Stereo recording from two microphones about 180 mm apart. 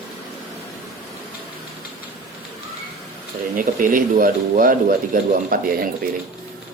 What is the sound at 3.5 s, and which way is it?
Speech, 50° right (ahead or behind).